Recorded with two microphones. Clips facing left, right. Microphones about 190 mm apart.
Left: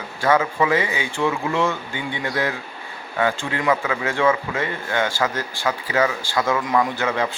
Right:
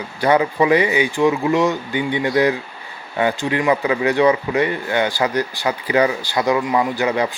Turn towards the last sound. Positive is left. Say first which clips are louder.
# right 3 dB
turn(degrees=-15)  # may be behind; listen again after turning